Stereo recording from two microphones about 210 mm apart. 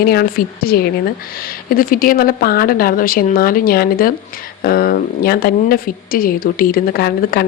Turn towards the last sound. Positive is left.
turn(degrees=45)  # may be behind; listen again after turning